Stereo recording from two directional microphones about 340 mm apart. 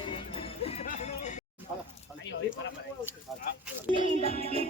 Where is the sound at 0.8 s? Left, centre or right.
Left.